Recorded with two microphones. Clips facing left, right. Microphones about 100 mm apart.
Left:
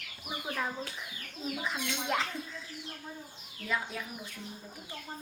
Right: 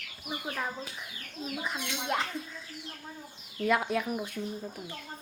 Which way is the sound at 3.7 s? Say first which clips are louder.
Right 8 dB; 65° right (ahead or behind).